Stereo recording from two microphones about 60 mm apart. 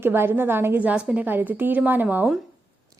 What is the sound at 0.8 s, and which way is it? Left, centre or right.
Speech, right.